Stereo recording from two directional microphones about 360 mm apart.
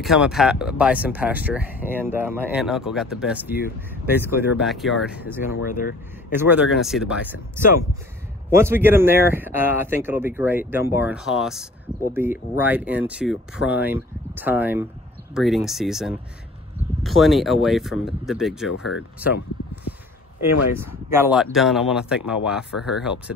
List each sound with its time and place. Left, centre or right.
0.0 s speech: centre
8.5 s speech: centre
18.7 s speech: left
20.8 s speech: centre